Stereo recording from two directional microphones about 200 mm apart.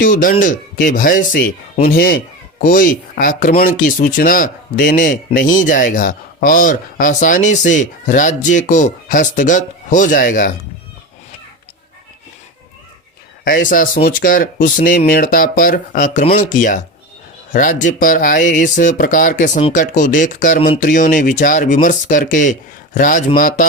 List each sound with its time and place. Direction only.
0.0 s speech: 45° left (ahead or behind)
13.4 s speech: 45° left (ahead or behind)